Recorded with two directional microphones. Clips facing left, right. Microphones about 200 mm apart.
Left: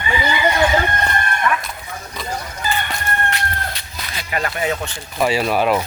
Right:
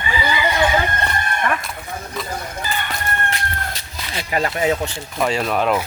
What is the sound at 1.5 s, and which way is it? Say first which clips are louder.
Chicken: left 2 dB; 35° right (ahead or behind).